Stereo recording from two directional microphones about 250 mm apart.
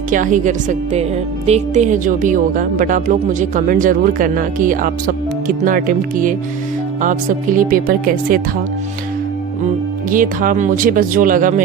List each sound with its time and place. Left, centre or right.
0.1 s a woman's voice: right
10.1 s speech: right